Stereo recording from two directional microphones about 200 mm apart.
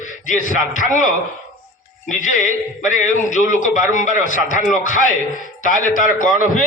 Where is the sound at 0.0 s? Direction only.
40° left (ahead or behind).